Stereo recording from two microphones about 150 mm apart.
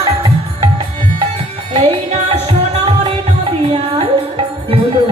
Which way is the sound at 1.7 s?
45° right (ahead or behind).